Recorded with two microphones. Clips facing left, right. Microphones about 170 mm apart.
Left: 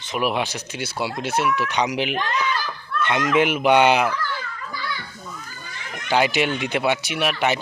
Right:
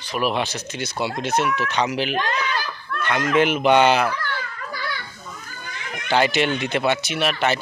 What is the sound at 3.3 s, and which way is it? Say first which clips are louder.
Speech: right 1 dB; 10° left (ahead or behind).